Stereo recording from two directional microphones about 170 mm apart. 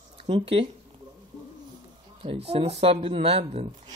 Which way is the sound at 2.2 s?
35° right (ahead or behind).